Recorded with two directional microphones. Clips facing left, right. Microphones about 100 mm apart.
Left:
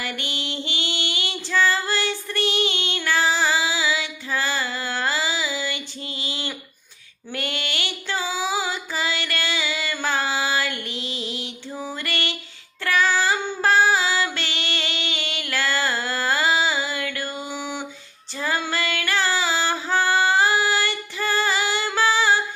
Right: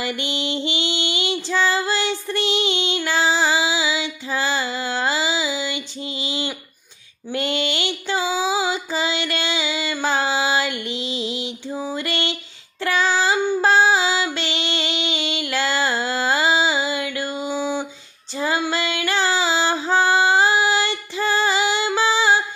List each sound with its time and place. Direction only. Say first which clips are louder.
0.0 s female singing: right 5 dB; 20° right (ahead or behind)
7.3 s a sound: right 6 dB; 20° right (ahead or behind)
12.8 s female singing: right 1 dB; 20° right (ahead or behind)